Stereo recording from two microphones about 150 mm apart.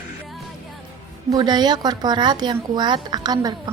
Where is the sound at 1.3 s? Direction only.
30° right (ahead or behind).